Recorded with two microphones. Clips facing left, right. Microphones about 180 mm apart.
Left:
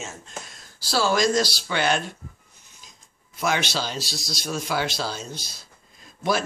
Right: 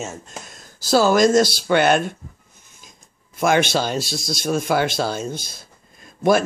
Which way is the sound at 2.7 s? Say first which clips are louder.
Right 3 dB; 50° right (ahead or behind).